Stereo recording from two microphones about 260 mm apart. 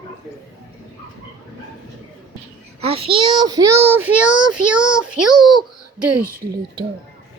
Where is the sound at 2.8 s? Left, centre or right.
Right; by 4.8 s centre.